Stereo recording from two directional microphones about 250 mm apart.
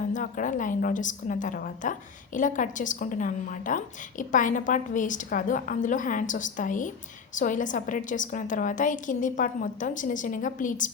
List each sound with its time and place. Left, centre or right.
0.1 s a woman's voice: left